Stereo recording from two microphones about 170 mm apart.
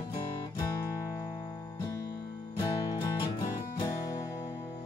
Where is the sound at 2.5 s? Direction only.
25° left (ahead or behind).